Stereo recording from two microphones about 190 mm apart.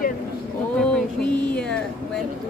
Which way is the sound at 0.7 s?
5° left (ahead or behind).